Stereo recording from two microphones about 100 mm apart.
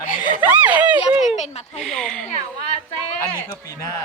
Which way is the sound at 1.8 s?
5° left (ahead or behind).